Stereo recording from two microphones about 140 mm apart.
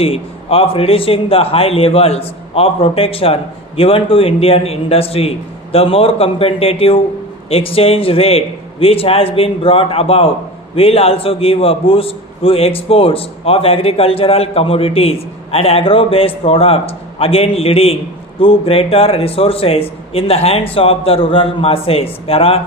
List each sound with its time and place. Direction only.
0.0 s a man's voice: 40° left (ahead or behind)